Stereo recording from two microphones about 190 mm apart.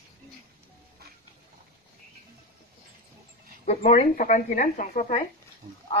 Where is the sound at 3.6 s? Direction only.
40° left (ahead or behind).